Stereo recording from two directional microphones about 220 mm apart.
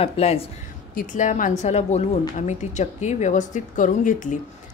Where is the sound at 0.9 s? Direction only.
40° left (ahead or behind).